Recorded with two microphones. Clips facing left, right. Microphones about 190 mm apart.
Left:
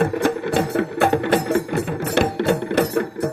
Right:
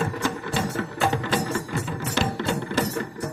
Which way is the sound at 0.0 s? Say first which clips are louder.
Left 8 dB; 60° left (ahead or behind).